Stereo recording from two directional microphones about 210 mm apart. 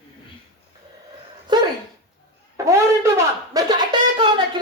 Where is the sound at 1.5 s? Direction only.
20° right (ahead or behind).